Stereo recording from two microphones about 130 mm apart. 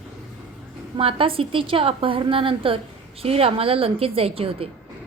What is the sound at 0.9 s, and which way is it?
A woman's voice, 45° right (ahead or behind).